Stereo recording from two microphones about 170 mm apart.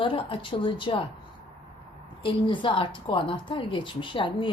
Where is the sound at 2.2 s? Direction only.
30° left (ahead or behind).